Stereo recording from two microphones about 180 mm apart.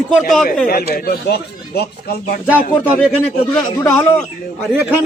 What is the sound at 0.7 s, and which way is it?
Speech, 60° left (ahead or behind).